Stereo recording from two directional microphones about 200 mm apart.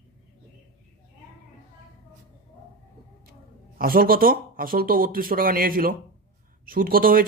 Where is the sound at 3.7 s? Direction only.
45° right (ahead or behind).